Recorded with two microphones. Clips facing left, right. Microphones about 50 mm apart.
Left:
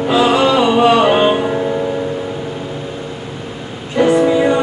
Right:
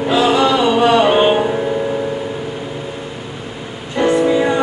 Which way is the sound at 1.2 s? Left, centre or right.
Centre.